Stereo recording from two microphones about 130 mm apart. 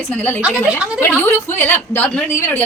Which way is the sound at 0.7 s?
10° right (ahead or behind).